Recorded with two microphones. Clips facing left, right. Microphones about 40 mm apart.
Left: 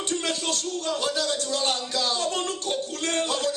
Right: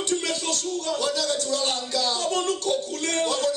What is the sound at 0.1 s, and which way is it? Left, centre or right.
Speech, left.